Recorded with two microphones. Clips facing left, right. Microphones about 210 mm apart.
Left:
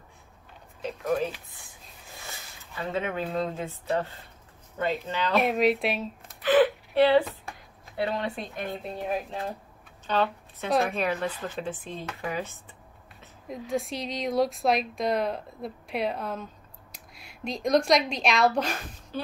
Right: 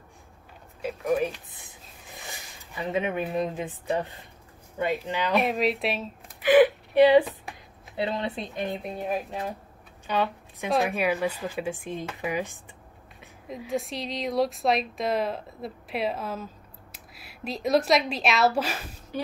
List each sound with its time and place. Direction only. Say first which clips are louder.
0.8 s speech: right 2 dB; 10° right (ahead or behind)
2.1 s a sound: right 2 dB; 15° right (ahead or behind)
3.3 s speech: right 1 dB; 15° right (ahead or behind)
5.4 s a woman's voice: left 2 dB; centre (ahead or behind)
6.4 s a sound: right 3 dB; 15° right (ahead or behind)
7.4 s speech: right 1 dB; 20° right (ahead or behind)
10.0 s speech: left 1 dB; 10° right (ahead or behind)
13.5 s a woman's voice: even; centre (ahead or behind)